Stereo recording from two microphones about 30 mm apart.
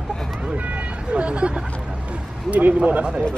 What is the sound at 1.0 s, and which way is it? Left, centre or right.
Speech, right.